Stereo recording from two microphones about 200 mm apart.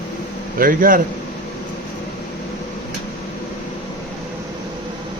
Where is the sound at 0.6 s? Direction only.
45° right (ahead or behind).